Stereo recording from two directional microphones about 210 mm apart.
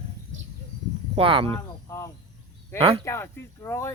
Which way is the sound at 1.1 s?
25° right (ahead or behind).